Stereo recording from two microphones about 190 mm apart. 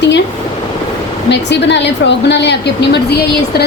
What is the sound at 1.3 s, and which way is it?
Speech, 65° left (ahead or behind).